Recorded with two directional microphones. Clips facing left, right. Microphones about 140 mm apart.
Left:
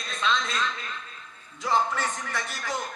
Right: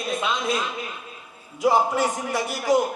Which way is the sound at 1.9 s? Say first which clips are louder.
Right 7 dB; 10° right (ahead or behind).